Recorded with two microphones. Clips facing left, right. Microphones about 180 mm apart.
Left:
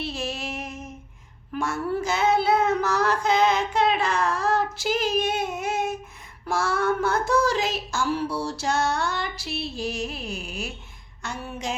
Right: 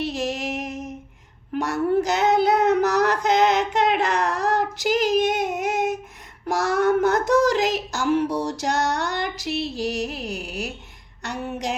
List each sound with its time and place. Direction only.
0.0 s music: 15° right (ahead or behind)
2.0 s child singing: 20° right (ahead or behind)
7.3 s a sound: 20° right (ahead or behind)